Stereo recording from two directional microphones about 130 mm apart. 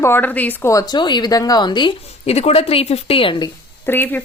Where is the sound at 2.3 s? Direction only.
50° left (ahead or behind).